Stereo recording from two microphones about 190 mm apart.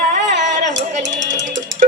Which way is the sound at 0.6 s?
40° right (ahead or behind).